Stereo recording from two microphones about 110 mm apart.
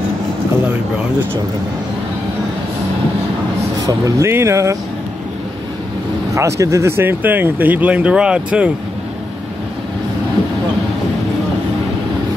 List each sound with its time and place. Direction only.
3.8 s speech: 30° right (ahead or behind)
6.3 s speech: 30° right (ahead or behind); by 8.7 s 10° right (ahead or behind)